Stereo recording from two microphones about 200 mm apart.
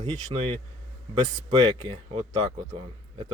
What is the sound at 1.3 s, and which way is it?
Speech, 25° right (ahead or behind).